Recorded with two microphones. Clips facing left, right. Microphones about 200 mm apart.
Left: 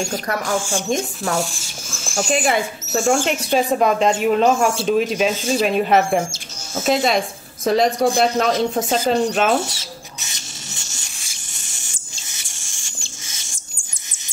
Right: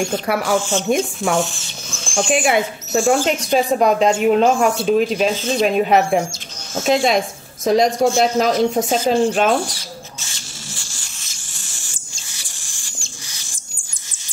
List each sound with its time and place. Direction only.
0.0 s speech: 10° right (ahead or behind)
0.6 s speech: 10° left (ahead or behind)
2.3 s speech: 5° right (ahead or behind)
9.6 s rodents: 25° left (ahead or behind)
12.4 s a sound: 25° left (ahead or behind)